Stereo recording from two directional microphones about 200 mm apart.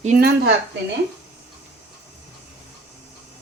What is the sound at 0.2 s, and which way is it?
Speech, 50° right (ahead or behind).